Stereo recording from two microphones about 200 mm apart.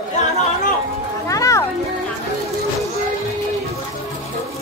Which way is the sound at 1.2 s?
15° left (ahead or behind).